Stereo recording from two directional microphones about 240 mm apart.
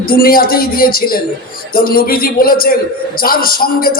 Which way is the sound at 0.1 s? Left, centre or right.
Left.